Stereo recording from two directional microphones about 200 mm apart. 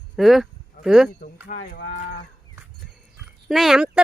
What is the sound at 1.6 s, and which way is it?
Speech, 45° left (ahead or behind).